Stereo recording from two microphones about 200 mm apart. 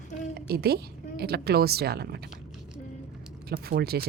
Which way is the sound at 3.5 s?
50° right (ahead or behind).